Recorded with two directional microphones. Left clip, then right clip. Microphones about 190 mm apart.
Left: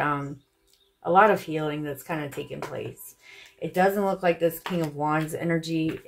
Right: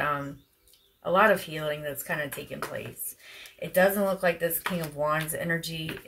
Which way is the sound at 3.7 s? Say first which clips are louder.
Even; 30° left (ahead or behind).